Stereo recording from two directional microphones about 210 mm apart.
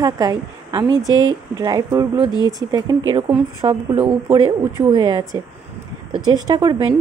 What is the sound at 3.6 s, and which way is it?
Speech, 25° right (ahead or behind).